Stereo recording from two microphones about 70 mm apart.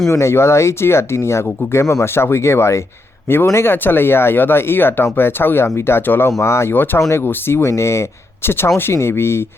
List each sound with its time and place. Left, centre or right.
0.1 s speech: left